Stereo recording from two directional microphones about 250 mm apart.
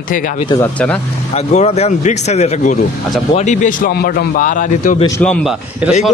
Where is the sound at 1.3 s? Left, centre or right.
Left.